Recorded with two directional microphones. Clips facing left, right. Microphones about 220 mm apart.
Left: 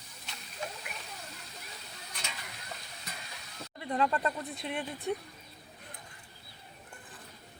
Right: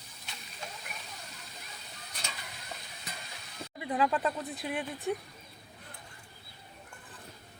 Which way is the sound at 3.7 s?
5° right (ahead or behind).